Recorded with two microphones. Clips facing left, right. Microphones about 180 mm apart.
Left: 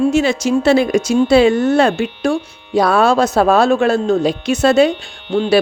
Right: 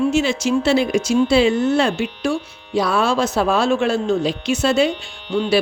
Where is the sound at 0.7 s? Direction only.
55° left (ahead or behind).